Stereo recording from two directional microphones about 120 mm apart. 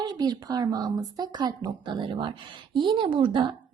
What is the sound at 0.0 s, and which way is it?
Speech, 35° right (ahead or behind).